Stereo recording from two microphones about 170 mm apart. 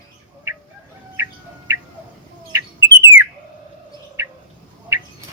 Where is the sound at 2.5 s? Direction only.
15° right (ahead or behind).